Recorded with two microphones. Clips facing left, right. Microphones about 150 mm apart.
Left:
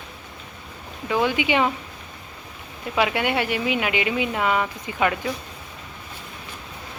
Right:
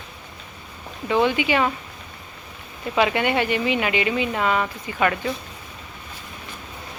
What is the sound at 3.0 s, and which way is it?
Speech, 5° left (ahead or behind).